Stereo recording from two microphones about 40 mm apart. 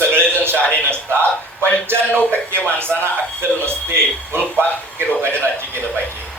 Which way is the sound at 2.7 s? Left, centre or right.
Right.